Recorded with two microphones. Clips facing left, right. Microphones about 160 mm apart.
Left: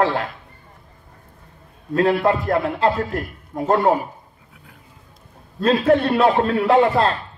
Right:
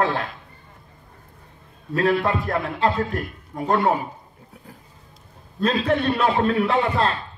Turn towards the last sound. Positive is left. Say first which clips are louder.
# left 5 dB
turn(degrees=30)  # may be behind; listen again after turning